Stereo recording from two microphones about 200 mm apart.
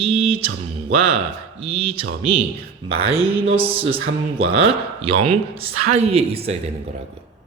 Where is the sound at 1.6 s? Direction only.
30° right (ahead or behind).